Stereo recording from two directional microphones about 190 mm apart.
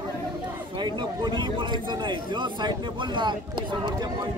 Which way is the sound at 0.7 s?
25° right (ahead or behind).